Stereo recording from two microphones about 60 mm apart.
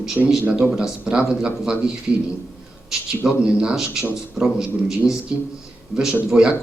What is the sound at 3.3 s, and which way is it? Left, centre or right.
A man's voice, centre.